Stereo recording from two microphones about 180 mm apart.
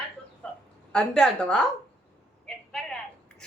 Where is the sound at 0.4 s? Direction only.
5° left (ahead or behind).